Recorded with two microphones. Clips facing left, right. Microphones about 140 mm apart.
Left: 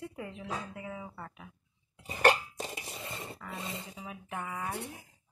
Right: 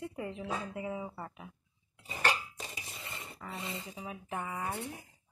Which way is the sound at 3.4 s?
10° right (ahead or behind).